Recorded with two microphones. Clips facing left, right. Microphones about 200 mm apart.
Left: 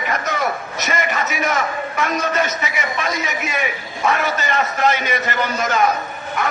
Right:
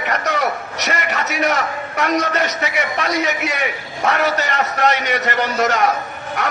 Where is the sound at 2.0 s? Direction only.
70° right (ahead or behind).